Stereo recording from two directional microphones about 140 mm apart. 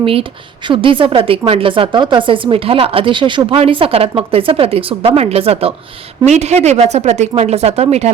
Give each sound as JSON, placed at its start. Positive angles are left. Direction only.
{"t": 0.0, "sound": "a woman's voice", "side_deg": -40}